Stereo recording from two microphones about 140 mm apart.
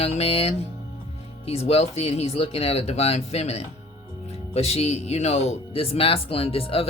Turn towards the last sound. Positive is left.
turn(degrees=45)  # may be behind; listen again after turning